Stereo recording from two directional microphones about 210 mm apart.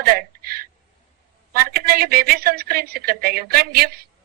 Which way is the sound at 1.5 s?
45° right (ahead or behind).